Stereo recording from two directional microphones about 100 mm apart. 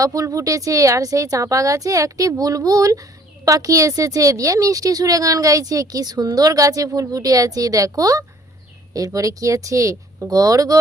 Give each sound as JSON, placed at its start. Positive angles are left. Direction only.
{"t": 0.0, "sound": "speech", "side_deg": -35}